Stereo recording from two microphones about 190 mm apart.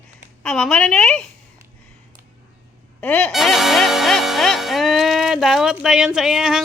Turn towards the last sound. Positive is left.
turn(degrees=-5)  # may be behind; listen again after turning